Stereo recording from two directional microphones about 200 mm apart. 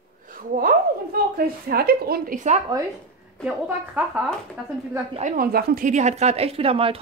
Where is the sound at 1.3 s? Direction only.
50° right (ahead or behind).